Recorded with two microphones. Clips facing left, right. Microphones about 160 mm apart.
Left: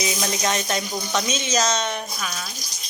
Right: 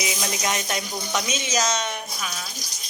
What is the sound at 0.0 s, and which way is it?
Speech, 15° right (ahead or behind).